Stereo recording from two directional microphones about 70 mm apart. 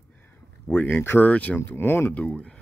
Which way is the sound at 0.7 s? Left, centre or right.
Left.